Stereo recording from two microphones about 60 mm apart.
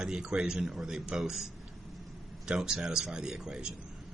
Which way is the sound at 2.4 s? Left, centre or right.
Centre.